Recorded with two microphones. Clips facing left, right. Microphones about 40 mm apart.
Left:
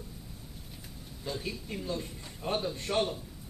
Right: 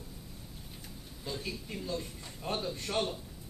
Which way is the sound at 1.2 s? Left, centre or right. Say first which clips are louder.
Left 2 dB; centre.